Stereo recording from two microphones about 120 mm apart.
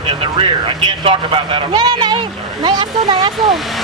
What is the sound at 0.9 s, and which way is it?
Speech, 40° right (ahead or behind).